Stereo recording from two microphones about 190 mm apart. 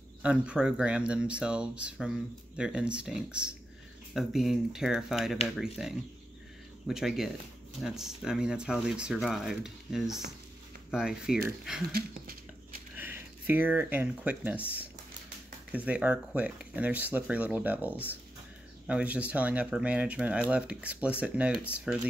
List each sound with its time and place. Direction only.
0.2 s speech: 5° right (ahead or behind)
11.9 s speech: 50° right (ahead or behind)
12.9 s speech: 10° right (ahead or behind)
15.7 s speech: 10° right (ahead or behind)